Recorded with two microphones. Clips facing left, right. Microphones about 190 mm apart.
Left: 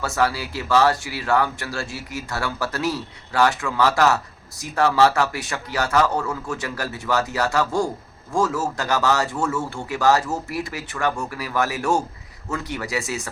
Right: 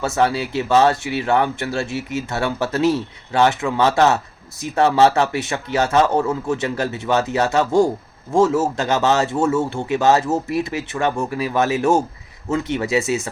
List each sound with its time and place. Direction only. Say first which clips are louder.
0.0 s speech: right 4 dB; 25° right (ahead or behind)